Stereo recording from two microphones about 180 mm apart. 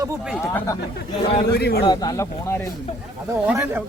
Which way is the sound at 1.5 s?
60° left (ahead or behind).